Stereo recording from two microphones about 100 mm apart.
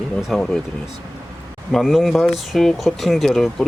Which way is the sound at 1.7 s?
Centre (ahead or behind).